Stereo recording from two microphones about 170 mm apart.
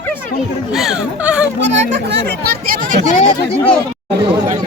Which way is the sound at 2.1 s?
75° right (ahead or behind).